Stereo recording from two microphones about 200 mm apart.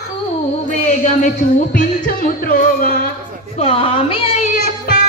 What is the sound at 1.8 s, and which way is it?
Music, 45° left (ahead or behind).